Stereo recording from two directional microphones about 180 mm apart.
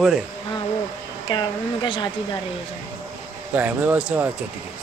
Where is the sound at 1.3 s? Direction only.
25° left (ahead or behind).